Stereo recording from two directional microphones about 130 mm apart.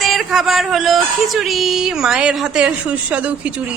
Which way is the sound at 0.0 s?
Centre (ahead or behind).